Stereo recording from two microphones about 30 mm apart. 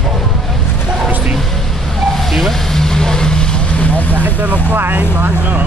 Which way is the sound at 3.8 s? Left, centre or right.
Left.